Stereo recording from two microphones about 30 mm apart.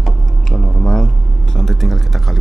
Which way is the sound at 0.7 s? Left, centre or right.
Centre.